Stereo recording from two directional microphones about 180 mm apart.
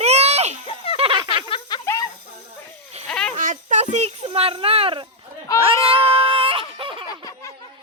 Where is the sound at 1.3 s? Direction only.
25° left (ahead or behind).